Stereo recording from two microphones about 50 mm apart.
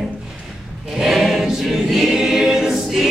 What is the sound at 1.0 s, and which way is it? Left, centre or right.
Choir, centre.